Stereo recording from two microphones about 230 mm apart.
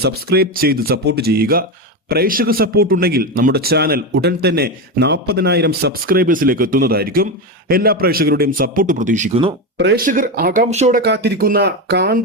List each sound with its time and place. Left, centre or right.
0.0 s a man's voice: right
9.7 s speech: right
10.1 s speech: right
11.0 s a man's voice: right